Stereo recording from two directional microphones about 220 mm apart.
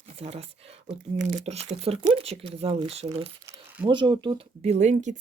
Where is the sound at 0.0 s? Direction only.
30° right (ahead or behind).